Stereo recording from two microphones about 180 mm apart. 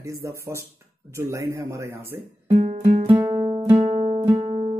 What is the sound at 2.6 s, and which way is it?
Music, 45° right (ahead or behind).